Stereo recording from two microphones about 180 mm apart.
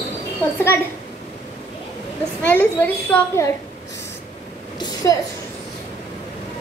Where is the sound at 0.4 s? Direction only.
10° left (ahead or behind).